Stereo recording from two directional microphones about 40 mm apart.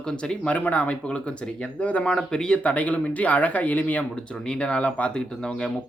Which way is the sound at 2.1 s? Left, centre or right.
Centre.